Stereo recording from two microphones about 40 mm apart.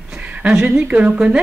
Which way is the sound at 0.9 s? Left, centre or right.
Right.